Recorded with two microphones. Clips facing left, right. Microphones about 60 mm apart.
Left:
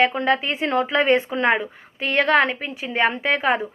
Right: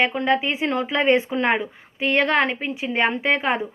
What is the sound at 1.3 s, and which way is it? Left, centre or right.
Speech, centre.